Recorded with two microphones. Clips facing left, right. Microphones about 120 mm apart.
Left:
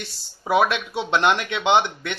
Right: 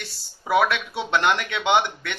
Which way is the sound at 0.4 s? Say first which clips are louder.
Left 1 dB; 20° left (ahead or behind).